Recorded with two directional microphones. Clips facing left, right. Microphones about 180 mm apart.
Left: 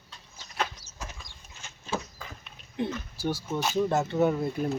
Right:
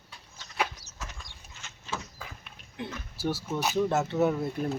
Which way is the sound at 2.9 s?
5° right (ahead or behind).